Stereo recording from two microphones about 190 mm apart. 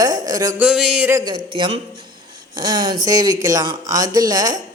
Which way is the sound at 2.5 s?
20° right (ahead or behind).